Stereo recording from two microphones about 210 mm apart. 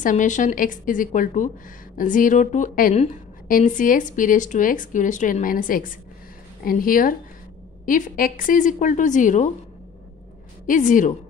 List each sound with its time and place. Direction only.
0.0 s a woman's voice: 35° left (ahead or behind)
10.7 s a woman's voice: 40° left (ahead or behind)